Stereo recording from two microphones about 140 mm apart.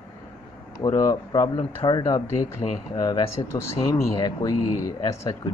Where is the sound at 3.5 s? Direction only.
20° left (ahead or behind).